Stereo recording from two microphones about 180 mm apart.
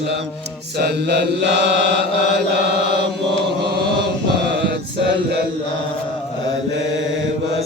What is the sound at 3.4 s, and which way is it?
Chant, 65° right (ahead or behind).